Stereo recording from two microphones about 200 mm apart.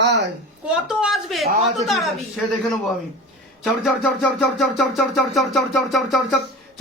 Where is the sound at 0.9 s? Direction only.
Centre (ahead or behind).